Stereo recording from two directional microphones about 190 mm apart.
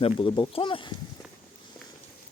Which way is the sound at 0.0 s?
25° left (ahead or behind).